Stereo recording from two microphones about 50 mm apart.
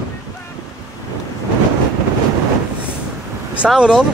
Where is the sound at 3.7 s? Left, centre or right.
Centre.